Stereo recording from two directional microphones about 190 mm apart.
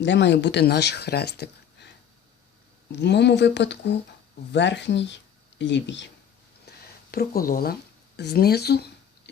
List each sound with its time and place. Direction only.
0.0 s speech: 65° left (ahead or behind)
2.9 s speech: 65° left (ahead or behind)
6.7 s speech: 55° left (ahead or behind)